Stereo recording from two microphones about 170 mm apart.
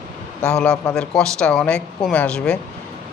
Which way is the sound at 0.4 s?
5° left (ahead or behind).